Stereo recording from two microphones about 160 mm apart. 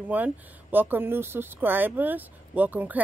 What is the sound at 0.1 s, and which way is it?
Speech, 10° right (ahead or behind).